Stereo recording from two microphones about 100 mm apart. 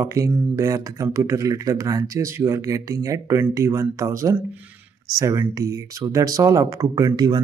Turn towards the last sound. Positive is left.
turn(degrees=-45)  # may be behind; listen again after turning